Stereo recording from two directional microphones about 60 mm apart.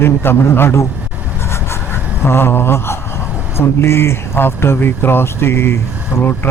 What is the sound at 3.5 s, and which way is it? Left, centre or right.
Speech, left.